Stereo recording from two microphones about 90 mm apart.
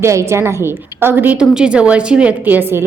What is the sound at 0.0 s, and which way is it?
A woman's voice, 30° right (ahead or behind).